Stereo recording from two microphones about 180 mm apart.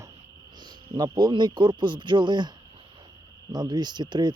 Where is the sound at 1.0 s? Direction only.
25° right (ahead or behind).